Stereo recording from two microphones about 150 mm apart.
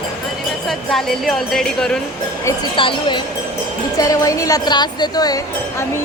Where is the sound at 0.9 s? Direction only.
Centre (ahead or behind).